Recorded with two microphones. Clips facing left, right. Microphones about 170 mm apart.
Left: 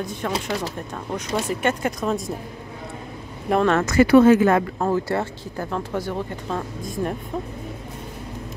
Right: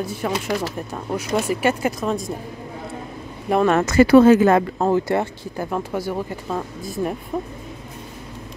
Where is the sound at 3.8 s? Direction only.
25° right (ahead or behind).